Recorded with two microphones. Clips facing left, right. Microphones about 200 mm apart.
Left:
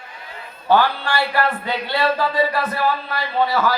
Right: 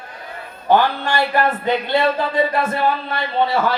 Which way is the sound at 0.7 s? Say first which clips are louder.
Right 1 dB; 20° right (ahead or behind).